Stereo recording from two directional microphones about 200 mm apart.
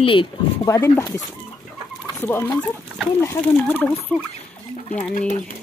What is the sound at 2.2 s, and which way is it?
Speech, 10° left (ahead or behind).